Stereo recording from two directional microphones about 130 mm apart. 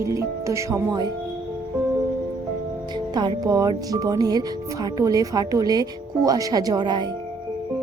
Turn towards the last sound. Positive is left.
turn(degrees=-35)  # may be behind; listen again after turning